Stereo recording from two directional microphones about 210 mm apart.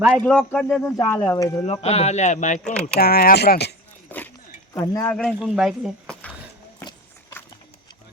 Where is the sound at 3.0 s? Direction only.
45° left (ahead or behind).